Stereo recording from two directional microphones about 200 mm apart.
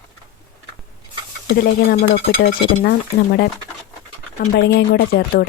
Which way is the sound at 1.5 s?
50° left (ahead or behind).